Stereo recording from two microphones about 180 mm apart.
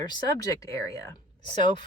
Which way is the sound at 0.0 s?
20° left (ahead or behind).